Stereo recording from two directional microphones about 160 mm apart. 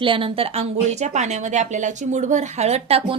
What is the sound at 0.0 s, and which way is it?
A woman's voice, 30° right (ahead or behind).